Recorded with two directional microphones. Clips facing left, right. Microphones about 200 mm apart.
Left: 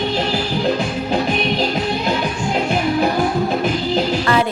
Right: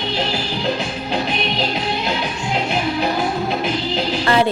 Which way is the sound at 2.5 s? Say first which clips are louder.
Left 2 dB; 45° left (ahead or behind).